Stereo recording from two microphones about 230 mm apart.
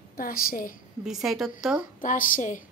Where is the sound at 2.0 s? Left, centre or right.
Left.